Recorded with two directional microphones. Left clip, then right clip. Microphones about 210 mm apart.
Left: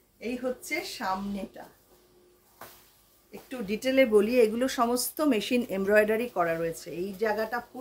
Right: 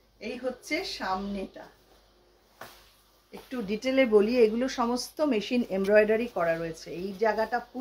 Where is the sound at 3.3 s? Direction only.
25° left (ahead or behind).